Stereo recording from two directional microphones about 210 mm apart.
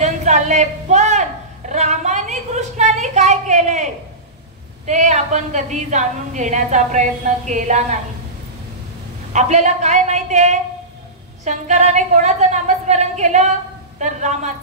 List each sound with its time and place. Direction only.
0.0 s a sound: 35° right (ahead or behind)
1.7 s a woman's voice: 35° right (ahead or behind)
9.3 s a woman's voice: 35° right (ahead or behind)